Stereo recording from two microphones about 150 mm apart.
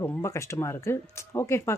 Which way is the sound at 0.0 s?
20° left (ahead or behind).